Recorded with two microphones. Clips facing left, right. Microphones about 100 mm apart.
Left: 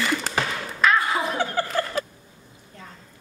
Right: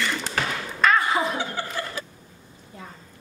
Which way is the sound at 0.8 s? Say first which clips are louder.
Right 1 dB; centre (ahead or behind).